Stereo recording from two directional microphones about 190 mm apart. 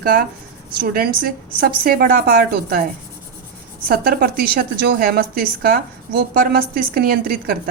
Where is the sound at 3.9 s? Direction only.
50° right (ahead or behind).